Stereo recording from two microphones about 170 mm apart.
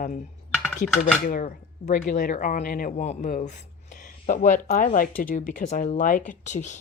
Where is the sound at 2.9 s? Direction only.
40° left (ahead or behind).